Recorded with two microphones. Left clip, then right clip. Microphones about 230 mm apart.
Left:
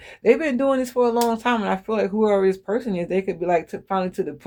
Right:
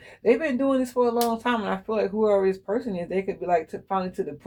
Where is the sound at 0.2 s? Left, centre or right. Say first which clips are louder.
Left 4 dB; left.